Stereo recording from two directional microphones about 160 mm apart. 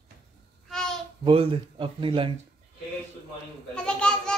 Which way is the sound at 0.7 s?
5° left (ahead or behind).